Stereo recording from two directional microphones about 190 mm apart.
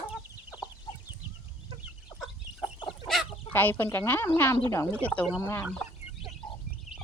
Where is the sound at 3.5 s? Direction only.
10° left (ahead or behind).